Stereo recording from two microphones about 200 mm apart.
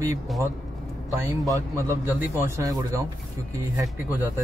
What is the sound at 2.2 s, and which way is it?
Speech, 10° right (ahead or behind).